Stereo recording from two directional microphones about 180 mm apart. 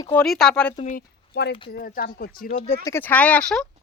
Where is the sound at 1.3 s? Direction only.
65° left (ahead or behind).